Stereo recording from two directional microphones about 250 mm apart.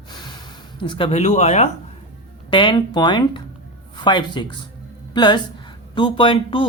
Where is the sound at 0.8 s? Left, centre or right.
Centre.